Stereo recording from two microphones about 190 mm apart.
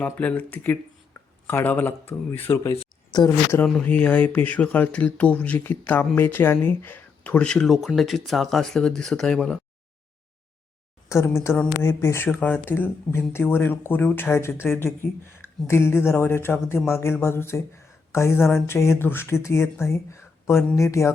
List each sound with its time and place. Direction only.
0.0 s speech: 10° left (ahead or behind)
11.1 s speech: 15° left (ahead or behind)